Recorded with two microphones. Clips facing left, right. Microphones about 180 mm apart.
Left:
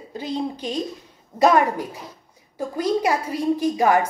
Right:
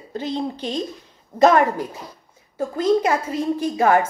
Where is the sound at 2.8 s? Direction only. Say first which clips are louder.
Right 3 dB; 15° left (ahead or behind).